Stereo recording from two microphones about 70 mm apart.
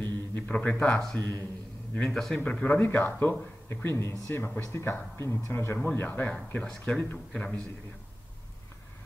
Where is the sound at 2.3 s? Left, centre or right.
Left.